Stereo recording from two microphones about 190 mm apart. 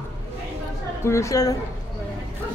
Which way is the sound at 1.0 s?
15° left (ahead or behind).